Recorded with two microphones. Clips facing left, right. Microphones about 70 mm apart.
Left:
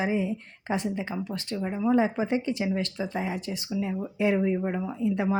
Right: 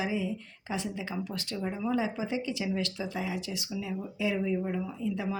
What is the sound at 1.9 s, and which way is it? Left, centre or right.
Speech, left.